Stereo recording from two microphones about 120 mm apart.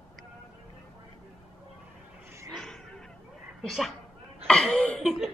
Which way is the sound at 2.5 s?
5° left (ahead or behind).